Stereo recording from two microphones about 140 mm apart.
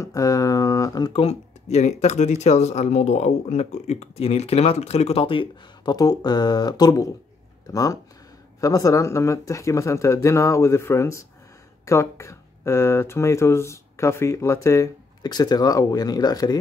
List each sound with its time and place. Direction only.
0.0 s speech: 25° left (ahead or behind)
1.2 s speech: 50° left (ahead or behind); by 16.5 s 25° left (ahead or behind)